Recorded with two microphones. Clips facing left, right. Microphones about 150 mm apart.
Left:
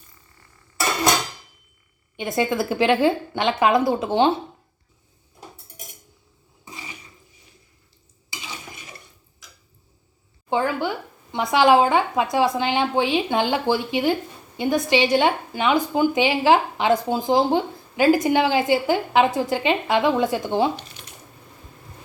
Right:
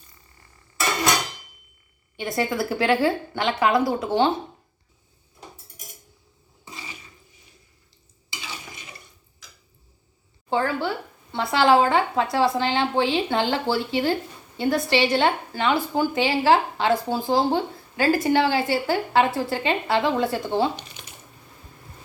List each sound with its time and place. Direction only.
2.1 s speech: 20° left (ahead or behind)
10.5 s speech: 15° left (ahead or behind)